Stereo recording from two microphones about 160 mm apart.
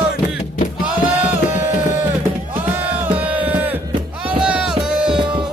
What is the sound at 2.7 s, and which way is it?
Music, 10° right (ahead or behind).